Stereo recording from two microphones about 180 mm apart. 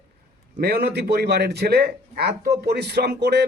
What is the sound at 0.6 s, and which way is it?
A man's voice, 60° right (ahead or behind).